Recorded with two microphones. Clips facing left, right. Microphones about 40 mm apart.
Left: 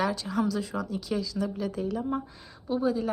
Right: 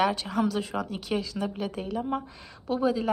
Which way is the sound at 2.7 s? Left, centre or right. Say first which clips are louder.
Right 1 dB; right.